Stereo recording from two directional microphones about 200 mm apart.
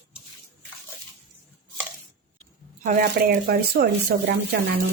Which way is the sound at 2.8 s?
45° right (ahead or behind).